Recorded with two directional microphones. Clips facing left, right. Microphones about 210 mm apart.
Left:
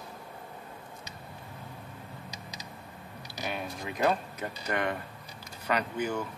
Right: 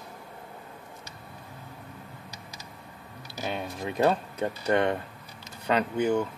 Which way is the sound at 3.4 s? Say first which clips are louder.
Right 3 dB; 30° right (ahead or behind).